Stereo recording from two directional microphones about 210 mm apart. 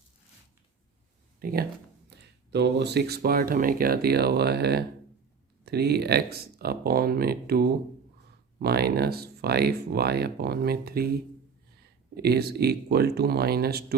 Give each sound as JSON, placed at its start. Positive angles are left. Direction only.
{"t": 1.4, "sound": "speech", "side_deg": -45}
{"t": 12.1, "sound": "speech", "side_deg": -50}